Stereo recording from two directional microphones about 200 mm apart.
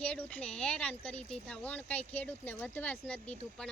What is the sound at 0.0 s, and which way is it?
Speech, 5° left (ahead or behind).